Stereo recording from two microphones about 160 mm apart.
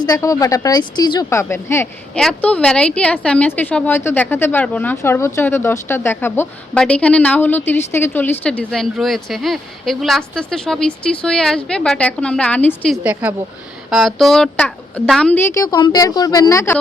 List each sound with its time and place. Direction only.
0.0 s a woman's voice: 20° left (ahead or behind); by 13.0 s 5° left (ahead or behind)
13.0 s a woman's voice: 10° right (ahead or behind); by 16.7 s 20° left (ahead or behind)